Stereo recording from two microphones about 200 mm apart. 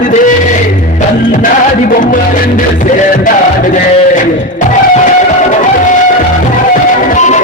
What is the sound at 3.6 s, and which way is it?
Sheep, 40° left (ahead or behind).